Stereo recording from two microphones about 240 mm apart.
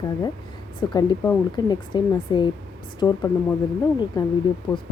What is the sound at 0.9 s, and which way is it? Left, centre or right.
Speech, centre.